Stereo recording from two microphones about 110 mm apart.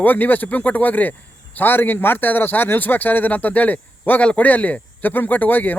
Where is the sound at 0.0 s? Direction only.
15° left (ahead or behind).